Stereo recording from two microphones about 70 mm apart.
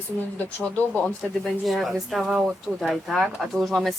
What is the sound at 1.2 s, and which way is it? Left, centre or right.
Speech, centre.